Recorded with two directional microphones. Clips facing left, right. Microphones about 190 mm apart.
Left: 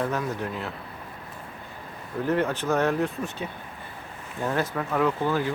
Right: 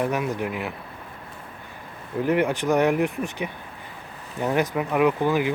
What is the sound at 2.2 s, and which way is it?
Speech, 15° right (ahead or behind).